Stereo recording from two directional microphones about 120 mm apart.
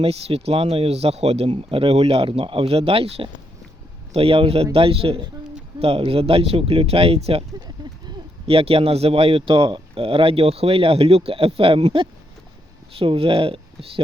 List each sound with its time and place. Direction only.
0.0 s speech: 55° right (ahead or behind)
8.4 s speech: 55° right (ahead or behind)